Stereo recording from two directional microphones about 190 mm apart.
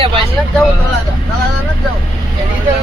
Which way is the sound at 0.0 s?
25° right (ahead or behind).